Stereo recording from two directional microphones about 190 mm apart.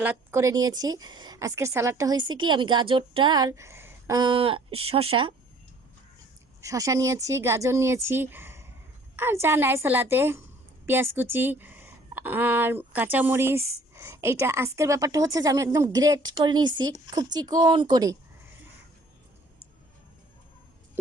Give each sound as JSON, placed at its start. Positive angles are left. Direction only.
{"t": 0.0, "sound": "a woman's voice", "side_deg": -10}
{"t": 6.6, "sound": "a woman's voice", "side_deg": -15}